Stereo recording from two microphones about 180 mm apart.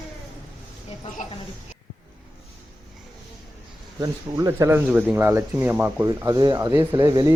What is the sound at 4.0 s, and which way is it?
Speech, 15° right (ahead or behind).